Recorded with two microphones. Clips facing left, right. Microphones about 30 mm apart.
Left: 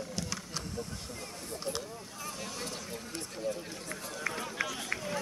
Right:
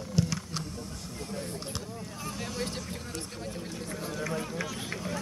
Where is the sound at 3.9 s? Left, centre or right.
Centre.